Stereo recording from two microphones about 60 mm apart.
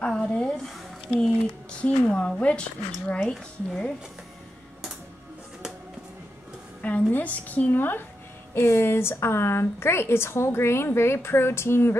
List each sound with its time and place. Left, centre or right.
0.0 s a sound: centre
1.2 s speech: centre
6.8 s a woman's voice: left